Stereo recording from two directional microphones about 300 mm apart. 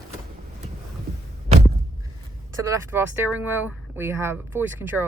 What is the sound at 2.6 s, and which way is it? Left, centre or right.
Speech, centre.